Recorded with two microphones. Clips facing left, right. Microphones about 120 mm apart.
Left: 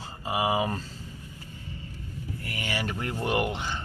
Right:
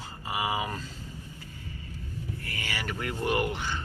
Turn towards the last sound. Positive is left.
turn(degrees=20)  # may be behind; listen again after turning